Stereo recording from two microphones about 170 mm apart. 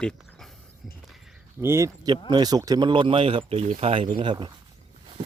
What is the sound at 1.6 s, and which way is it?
Speech, 15° right (ahead or behind).